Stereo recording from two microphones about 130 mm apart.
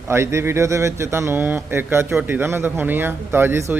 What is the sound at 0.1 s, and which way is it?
Speech, 20° right (ahead or behind).